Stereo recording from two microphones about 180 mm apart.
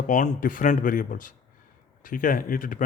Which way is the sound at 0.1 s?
45° left (ahead or behind).